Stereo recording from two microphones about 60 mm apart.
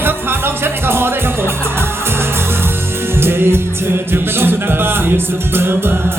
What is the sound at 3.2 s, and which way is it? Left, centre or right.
Music, right.